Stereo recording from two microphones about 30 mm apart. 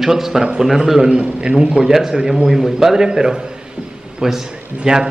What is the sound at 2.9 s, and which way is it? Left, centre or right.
Speech, right.